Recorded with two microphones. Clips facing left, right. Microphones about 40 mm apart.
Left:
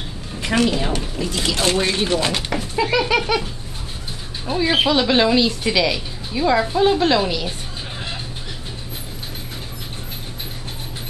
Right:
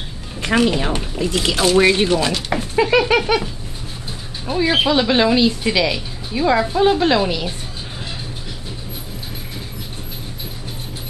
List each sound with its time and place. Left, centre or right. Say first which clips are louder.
0.4 s speech: right 2 dB; centre; by 2.0 s right
2.0 s speech: right 2 dB; left
2.8 s speech: right 4 dB; right
4.6 s speech: right 1 dB; centre